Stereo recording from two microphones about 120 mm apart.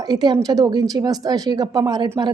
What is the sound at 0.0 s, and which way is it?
A woman's voice, 35° right (ahead or behind).